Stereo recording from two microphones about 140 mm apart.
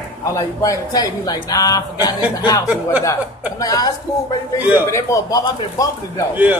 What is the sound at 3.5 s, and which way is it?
Speech, 25° left (ahead or behind).